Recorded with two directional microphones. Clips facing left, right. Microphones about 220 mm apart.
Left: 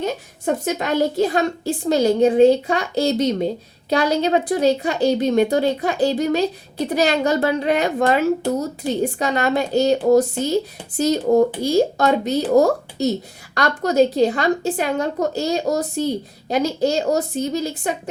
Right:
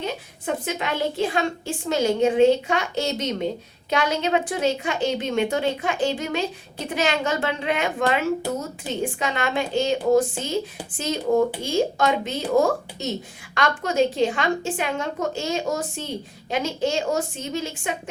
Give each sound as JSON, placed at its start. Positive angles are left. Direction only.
{"t": 0.0, "sound": "a woman's voice", "side_deg": 45}